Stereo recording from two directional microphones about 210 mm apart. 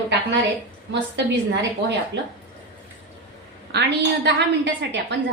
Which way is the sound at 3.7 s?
55° right (ahead or behind).